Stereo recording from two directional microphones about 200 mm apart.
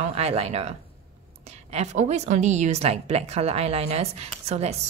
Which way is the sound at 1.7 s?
35° right (ahead or behind).